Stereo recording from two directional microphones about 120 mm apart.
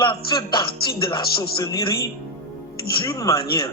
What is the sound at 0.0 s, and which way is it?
Speech, 40° left (ahead or behind).